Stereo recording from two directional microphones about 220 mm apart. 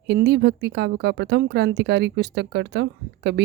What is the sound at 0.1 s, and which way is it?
A woman's voice, 50° right (ahead or behind).